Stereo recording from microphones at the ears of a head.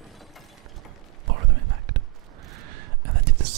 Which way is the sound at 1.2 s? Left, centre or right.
Right.